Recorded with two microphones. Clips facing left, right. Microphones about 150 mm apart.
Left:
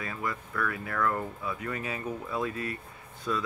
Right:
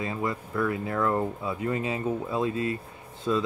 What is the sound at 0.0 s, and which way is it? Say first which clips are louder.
Speech: right 5 dB; 25° right (ahead or behind).